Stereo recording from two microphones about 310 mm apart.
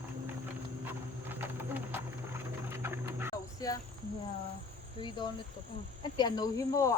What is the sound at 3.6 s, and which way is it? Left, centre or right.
Cricket, centre.